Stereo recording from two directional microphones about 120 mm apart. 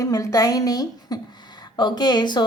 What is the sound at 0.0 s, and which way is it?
A woman's voice, 25° left (ahead or behind).